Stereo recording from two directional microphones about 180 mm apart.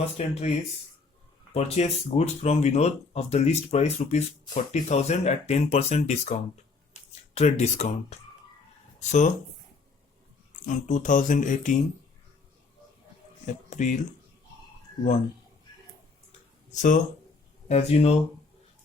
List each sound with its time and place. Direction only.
0.0 s speech: 35° left (ahead or behind)
1.5 s speech: 35° left (ahead or behind)
9.0 s speech: 40° left (ahead or behind)
10.7 s speech: 45° left (ahead or behind)
13.5 s speech: 45° left (ahead or behind)
16.7 s speech: 45° left (ahead or behind)